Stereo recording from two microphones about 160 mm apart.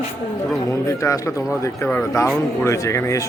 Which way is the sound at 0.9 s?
20° left (ahead or behind).